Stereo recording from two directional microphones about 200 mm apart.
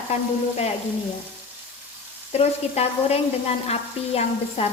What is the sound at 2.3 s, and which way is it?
Frying, 30° left (ahead or behind).